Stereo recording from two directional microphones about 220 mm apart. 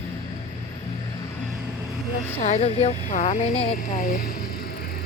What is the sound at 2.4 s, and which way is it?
Speech, 30° left (ahead or behind).